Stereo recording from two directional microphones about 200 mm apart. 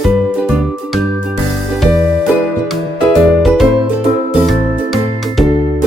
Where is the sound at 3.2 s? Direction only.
Centre (ahead or behind).